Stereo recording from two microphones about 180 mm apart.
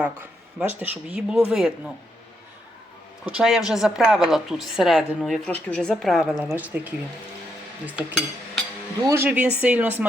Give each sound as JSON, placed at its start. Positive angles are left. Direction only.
{"t": 0.8, "sound": "a woman's voice", "side_deg": -10}
{"t": 3.2, "sound": "a woman's voice", "side_deg": -5}
{"t": 5.5, "sound": "a woman's voice", "side_deg": 5}
{"t": 9.0, "sound": "speech", "side_deg": -15}